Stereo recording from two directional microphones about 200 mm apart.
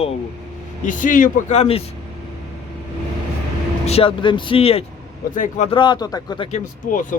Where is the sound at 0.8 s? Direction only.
40° left (ahead or behind).